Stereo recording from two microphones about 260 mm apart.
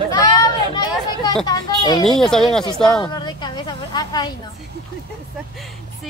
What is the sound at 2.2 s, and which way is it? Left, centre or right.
Speech, centre.